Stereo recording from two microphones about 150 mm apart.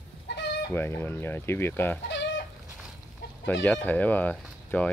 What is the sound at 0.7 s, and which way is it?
Speech, 15° left (ahead or behind).